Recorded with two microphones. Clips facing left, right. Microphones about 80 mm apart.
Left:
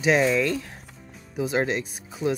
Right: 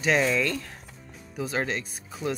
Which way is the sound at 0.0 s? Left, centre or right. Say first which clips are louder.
Left 3 dB; centre.